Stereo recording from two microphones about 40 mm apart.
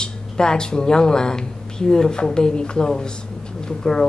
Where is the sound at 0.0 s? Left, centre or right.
Centre.